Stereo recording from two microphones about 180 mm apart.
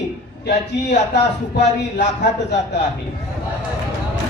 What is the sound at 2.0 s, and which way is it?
Speech, 70° left (ahead or behind).